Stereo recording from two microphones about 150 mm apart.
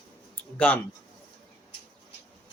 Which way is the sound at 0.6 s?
10° left (ahead or behind).